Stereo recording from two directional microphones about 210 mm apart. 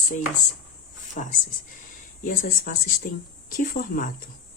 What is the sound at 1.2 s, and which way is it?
A woman's voice, 40° left (ahead or behind).